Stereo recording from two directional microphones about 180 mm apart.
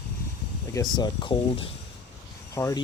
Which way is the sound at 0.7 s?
25° left (ahead or behind).